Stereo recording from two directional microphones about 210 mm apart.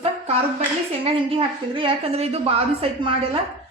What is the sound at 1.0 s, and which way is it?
A woman's voice, 25° right (ahead or behind).